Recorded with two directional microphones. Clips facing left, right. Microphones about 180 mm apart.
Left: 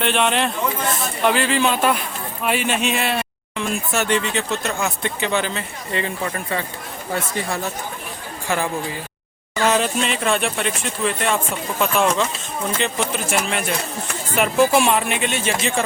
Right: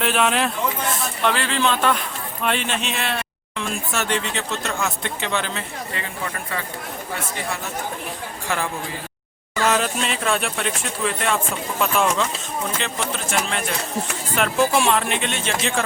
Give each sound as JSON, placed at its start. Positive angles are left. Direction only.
{"t": 0.0, "sound": "speech", "side_deg": 0}
{"t": 5.9, "sound": "speech", "side_deg": 25}
{"t": 9.6, "sound": "speech", "side_deg": 0}